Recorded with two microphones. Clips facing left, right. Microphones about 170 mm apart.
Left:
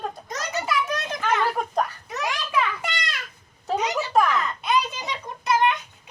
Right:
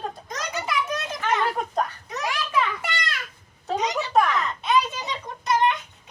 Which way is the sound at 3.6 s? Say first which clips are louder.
Left 1 dB; 5° left (ahead or behind).